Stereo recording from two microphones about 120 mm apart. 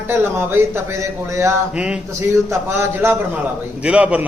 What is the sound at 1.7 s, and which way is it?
Speech, 10° right (ahead or behind).